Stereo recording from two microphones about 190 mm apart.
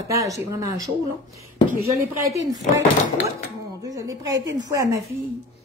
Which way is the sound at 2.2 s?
15° right (ahead or behind).